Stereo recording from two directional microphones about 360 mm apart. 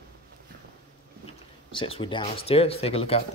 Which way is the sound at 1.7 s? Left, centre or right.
Centre.